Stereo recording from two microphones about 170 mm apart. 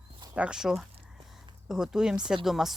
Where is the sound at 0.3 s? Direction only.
5° right (ahead or behind).